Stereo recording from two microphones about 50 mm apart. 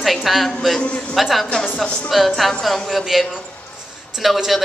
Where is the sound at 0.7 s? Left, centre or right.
Left.